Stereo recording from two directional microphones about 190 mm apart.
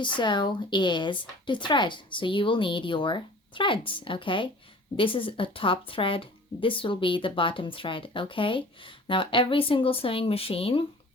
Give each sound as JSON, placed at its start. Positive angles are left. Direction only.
{"t": 0.0, "sound": "speech", "side_deg": 25}